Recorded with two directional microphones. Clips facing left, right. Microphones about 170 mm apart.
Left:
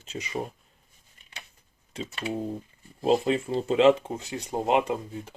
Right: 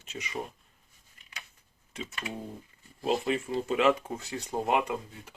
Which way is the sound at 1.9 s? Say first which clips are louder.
Left 6 dB; 30° left (ahead or behind).